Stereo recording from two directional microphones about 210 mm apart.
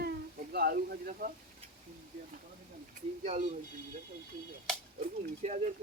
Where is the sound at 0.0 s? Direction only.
45° right (ahead or behind).